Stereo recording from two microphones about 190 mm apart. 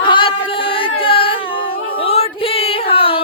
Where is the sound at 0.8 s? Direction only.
30° left (ahead or behind).